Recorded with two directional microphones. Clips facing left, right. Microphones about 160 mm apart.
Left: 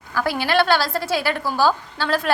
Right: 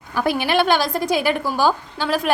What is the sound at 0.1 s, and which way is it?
A woman's voice, 20° right (ahead or behind).